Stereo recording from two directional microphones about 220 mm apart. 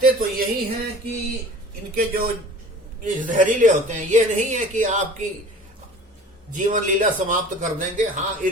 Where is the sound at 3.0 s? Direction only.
35° right (ahead or behind).